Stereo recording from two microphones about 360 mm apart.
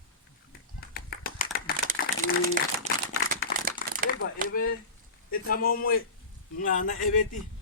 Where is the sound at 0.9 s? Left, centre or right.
Left.